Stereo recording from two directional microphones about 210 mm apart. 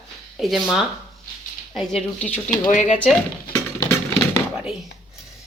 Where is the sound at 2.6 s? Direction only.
35° left (ahead or behind).